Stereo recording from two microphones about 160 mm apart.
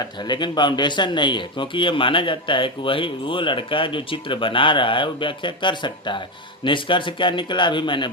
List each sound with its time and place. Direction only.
0.3 s speech: 30° left (ahead or behind)